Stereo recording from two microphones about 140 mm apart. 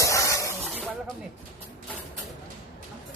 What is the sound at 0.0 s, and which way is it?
Snake, 20° left (ahead or behind).